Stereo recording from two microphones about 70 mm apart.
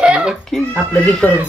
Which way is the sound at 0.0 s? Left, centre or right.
Centre.